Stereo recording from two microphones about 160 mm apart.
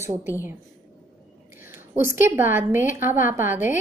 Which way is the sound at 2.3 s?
15° right (ahead or behind).